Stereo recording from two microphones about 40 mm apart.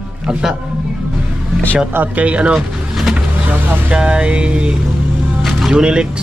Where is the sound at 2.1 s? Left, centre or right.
Right.